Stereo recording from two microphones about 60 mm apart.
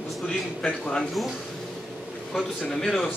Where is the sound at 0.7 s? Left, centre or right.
Centre.